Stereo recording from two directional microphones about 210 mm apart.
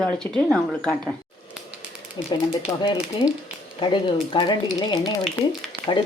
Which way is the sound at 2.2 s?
20° left (ahead or behind).